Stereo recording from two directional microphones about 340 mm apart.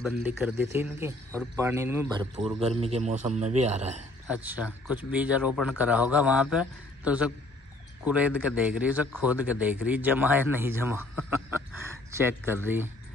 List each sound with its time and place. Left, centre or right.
0.0 s a man's voice: centre
4.3 s a man's voice: centre